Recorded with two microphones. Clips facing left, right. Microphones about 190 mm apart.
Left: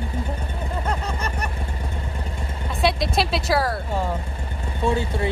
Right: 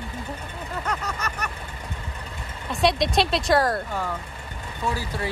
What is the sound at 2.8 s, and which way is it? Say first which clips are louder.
Speech: right 1 dB; centre (ahead or behind).